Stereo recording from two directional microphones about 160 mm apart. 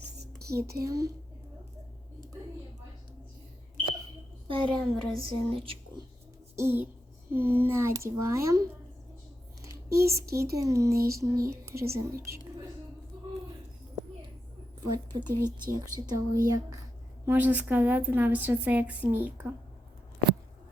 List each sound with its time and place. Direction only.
0.5 s speech: 20° right (ahead or behind)
4.4 s a woman's voice: 30° right (ahead or behind)
5.1 s a sound: 35° right (ahead or behind)
6.6 s a woman's voice: 15° right (ahead or behind)
9.6 s a sound: 20° right (ahead or behind)
10.5 s speech: 20° right (ahead or behind)
14.8 s speech: 25° right (ahead or behind)
17.2 s a woman's voice: 10° right (ahead or behind)